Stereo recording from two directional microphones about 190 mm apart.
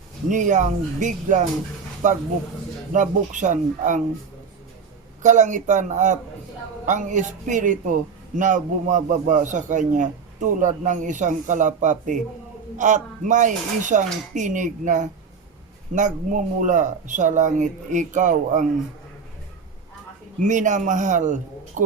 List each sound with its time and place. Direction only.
0.3 s a man's voice: 40° right (ahead or behind)
5.2 s a man's voice: 40° right (ahead or behind)
20.4 s a man's voice: 40° right (ahead or behind)